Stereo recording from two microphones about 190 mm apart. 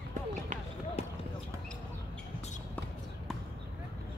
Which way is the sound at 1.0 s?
35° left (ahead or behind).